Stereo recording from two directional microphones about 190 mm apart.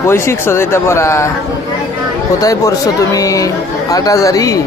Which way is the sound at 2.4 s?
20° left (ahead or behind).